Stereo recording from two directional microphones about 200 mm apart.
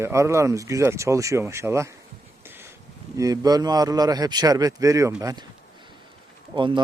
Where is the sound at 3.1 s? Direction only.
20° right (ahead or behind).